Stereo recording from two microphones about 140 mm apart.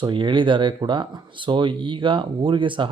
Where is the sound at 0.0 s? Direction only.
35° right (ahead or behind).